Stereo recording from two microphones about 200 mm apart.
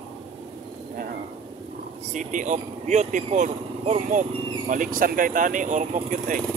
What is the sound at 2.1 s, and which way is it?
Speech, 40° right (ahead or behind).